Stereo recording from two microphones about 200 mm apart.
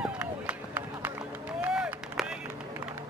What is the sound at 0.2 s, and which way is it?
Run, 10° right (ahead or behind).